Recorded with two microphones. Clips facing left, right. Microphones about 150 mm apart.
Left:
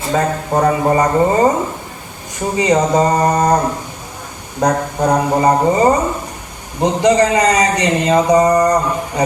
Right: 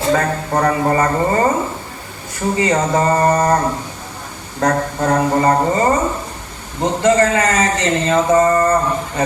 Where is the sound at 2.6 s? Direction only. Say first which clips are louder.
Left 4 dB; 15° left (ahead or behind).